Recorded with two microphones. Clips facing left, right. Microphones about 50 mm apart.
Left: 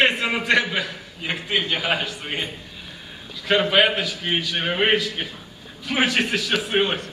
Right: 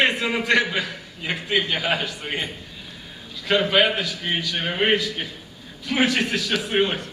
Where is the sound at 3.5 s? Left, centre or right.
Centre.